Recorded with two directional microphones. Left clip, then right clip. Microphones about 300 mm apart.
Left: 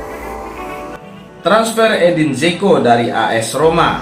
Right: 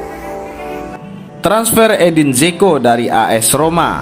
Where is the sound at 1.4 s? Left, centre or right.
Right.